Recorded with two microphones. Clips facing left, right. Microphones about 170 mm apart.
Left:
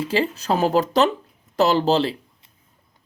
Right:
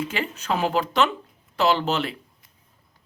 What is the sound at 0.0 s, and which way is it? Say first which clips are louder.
Speech: left 6 dB; 30° left (ahead or behind).